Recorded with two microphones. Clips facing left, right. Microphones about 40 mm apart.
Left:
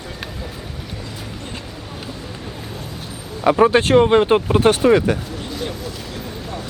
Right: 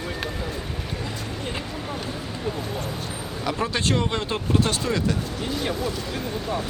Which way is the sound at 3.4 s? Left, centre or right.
Left.